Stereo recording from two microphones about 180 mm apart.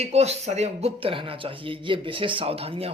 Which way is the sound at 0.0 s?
35° right (ahead or behind).